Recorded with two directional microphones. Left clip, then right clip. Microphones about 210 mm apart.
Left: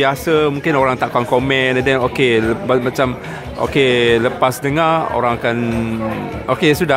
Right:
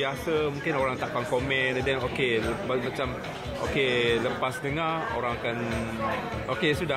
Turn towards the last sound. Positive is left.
turn(degrees=35)  # may be behind; listen again after turning